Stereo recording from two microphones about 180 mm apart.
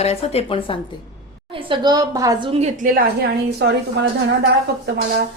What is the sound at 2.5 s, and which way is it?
A woman's voice, 40° right (ahead or behind).